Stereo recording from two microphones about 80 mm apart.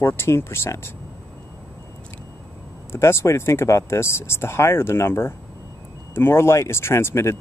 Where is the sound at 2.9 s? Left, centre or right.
Left.